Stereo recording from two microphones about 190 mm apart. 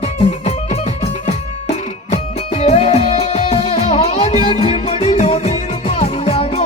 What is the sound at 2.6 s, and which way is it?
Music, 35° left (ahead or behind).